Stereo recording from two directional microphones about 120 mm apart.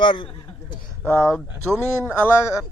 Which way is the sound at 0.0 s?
45° left (ahead or behind).